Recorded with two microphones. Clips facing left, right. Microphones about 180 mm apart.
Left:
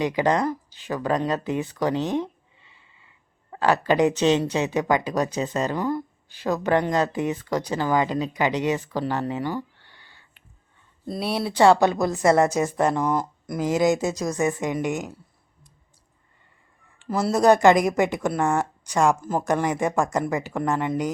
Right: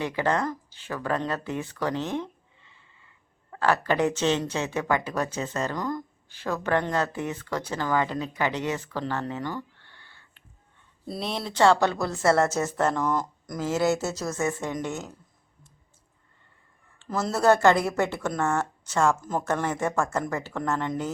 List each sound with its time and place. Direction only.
0.0 s a woman's voice: 15° left (ahead or behind)
11.0 s speech: centre (ahead or behind)
11.3 s a woman's voice: 10° left (ahead or behind)
17.0 s a woman's voice: 10° left (ahead or behind)